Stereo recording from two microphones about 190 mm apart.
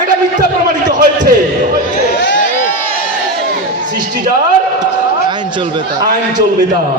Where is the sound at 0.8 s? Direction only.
40° right (ahead or behind).